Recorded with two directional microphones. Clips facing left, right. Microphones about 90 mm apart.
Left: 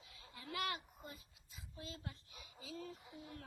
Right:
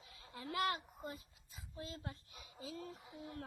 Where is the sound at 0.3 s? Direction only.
35° right (ahead or behind).